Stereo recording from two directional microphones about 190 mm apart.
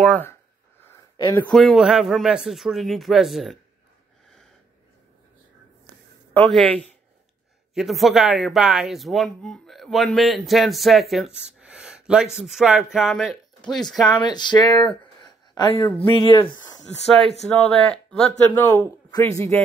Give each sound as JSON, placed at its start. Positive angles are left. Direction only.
{"t": 0.0, "sound": "speech", "side_deg": 10}
{"t": 0.8, "sound": "a sound", "side_deg": 15}
{"t": 1.4, "sound": "speech", "side_deg": 0}
{"t": 6.3, "sound": "speech", "side_deg": 5}
{"t": 14.2, "sound": "speech", "side_deg": 20}
{"t": 17.6, "sound": "speech", "side_deg": 5}
{"t": 18.5, "sound": "speech", "side_deg": 15}